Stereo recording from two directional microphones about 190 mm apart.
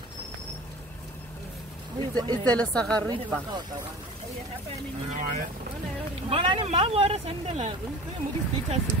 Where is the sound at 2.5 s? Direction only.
5° left (ahead or behind).